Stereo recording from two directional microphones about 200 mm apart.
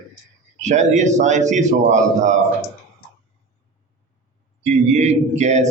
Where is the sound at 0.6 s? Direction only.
35° right (ahead or behind).